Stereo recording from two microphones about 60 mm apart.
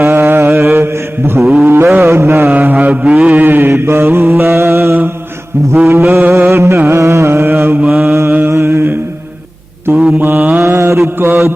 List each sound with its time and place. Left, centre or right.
0.0 s mantra: right
0.5 s mantra: right
1.6 s a sound: right
2.0 s mantra: right
2.5 s mantra: right
6.7 s music: right
7.0 s mantra: right
7.9 s mantra: centre
8.3 s mantra: right
8.5 s mantra: right
10.2 s mantra: right